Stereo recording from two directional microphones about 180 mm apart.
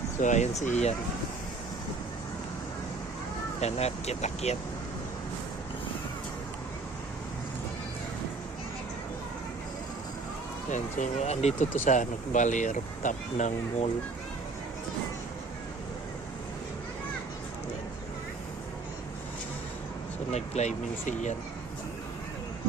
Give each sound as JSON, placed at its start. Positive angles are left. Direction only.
{"t": 0.2, "sound": "speech", "side_deg": 40}
{"t": 3.6, "sound": "speech", "side_deg": 35}
{"t": 10.7, "sound": "speech", "side_deg": 40}
{"t": 20.3, "sound": "speech", "side_deg": 40}